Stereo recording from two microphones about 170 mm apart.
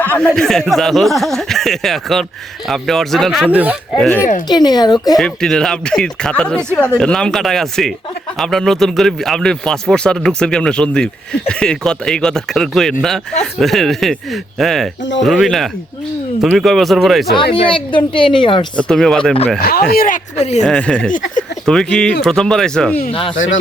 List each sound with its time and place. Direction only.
0.0 s speech: 10° left (ahead or behind)
3.4 s speech: 10° right (ahead or behind)
3.9 s speech: 5° left (ahead or behind)
4.4 s speech: 25° left (ahead or behind)
5.1 s speech: 5° left (ahead or behind)
17.3 s speech: 30° left (ahead or behind)
18.8 s speech: 5° left (ahead or behind)
19.9 s speech: 55° left (ahead or behind)
20.7 s speech: 5° left (ahead or behind)
21.1 s speech: 50° left (ahead or behind)
21.7 s speech: 5° left (ahead or behind)